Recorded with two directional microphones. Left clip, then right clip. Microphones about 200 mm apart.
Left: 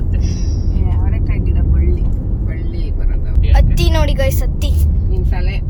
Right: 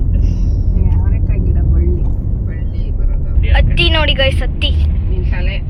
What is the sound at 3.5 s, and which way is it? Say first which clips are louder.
Vehicle: right 5 dB; 20° left (ahead or behind).